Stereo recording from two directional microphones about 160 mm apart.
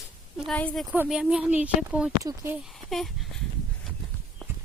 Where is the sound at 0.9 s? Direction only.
10° right (ahead or behind).